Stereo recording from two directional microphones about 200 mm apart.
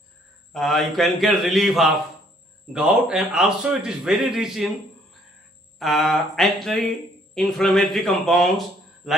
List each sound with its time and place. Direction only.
0.5 s speech: centre (ahead or behind)
5.8 s speech: centre (ahead or behind)